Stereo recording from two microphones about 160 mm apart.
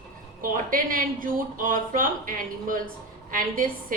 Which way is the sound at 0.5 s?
60° right (ahead or behind).